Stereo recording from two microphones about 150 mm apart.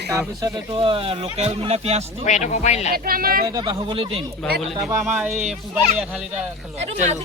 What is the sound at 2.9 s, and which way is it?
Speech, 80° right.